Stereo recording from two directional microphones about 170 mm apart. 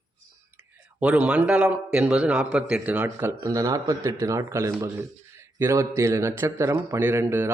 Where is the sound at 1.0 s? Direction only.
5° right (ahead or behind).